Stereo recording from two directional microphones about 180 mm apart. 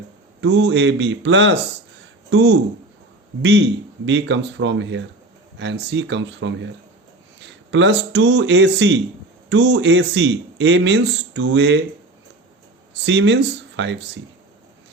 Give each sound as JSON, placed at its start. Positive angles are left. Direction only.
{"t": 0.4, "sound": "speech", "side_deg": -80}
{"t": 7.7, "sound": "speech", "side_deg": -85}
{"t": 12.9, "sound": "speech", "side_deg": -75}